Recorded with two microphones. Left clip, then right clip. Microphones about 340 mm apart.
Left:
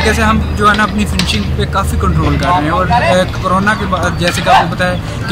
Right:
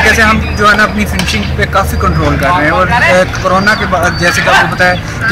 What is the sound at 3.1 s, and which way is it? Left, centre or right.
Speech, centre.